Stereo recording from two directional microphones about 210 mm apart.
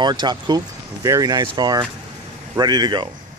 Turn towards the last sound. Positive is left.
turn(degrees=-20)  # may be behind; listen again after turning